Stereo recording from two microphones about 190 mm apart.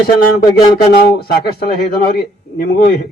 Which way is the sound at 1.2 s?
55° left (ahead or behind).